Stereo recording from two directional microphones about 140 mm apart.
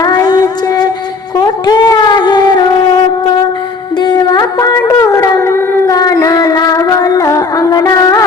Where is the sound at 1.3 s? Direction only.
30° left (ahead or behind).